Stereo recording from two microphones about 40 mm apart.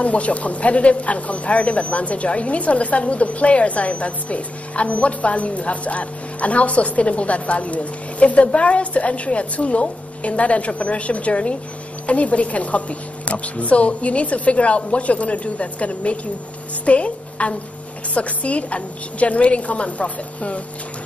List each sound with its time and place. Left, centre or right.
0.0 s a woman's voice: left